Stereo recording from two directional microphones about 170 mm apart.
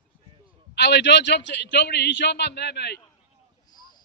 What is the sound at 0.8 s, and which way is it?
A man's voice, 80° left.